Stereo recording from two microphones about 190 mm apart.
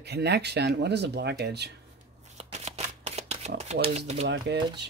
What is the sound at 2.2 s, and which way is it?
Shuffling cards, 35° right (ahead or behind).